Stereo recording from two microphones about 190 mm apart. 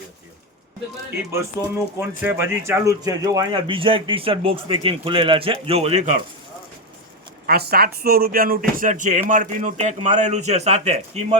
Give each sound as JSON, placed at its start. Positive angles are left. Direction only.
{"t": 1.6, "sound": "speech", "side_deg": -15}
{"t": 7.4, "sound": "a man's voice", "side_deg": -55}